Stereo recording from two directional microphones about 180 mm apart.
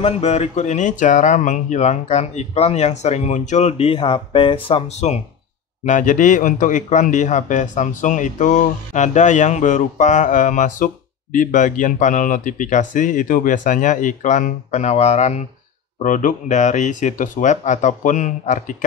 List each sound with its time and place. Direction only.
0.0 s a man's voice: 35° left (ahead or behind)